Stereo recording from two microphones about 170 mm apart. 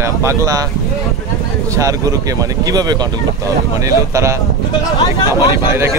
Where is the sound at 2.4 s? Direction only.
20° right (ahead or behind).